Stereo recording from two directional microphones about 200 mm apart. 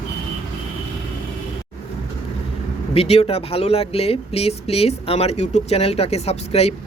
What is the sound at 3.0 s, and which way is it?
Speech, 30° left (ahead or behind).